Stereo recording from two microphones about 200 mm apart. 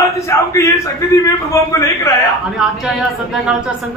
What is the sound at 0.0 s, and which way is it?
A man's voice, 15° left (ahead or behind).